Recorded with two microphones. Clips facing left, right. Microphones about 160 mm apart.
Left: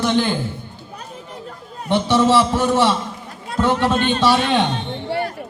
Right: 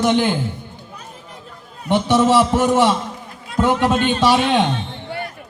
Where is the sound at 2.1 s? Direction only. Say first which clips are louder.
Right 1 dB; 15° right (ahead or behind).